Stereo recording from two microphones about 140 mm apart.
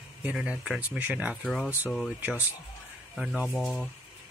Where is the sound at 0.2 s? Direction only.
10° right (ahead or behind).